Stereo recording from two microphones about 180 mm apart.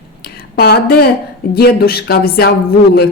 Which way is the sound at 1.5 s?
60° left (ahead or behind).